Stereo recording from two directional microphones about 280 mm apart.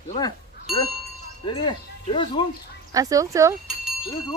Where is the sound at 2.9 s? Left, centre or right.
Centre.